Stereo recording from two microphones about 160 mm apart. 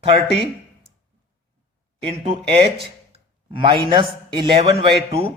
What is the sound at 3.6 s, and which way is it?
A man's voice, 30° right (ahead or behind).